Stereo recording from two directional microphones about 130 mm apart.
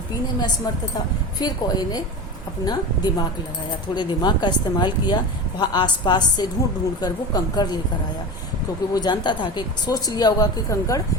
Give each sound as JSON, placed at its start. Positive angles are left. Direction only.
{"t": 1.4, "sound": "a woman's voice", "side_deg": 30}
{"t": 8.9, "sound": "speech", "side_deg": 30}